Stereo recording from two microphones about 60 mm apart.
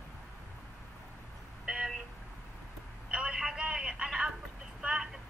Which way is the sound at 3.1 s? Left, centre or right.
Centre.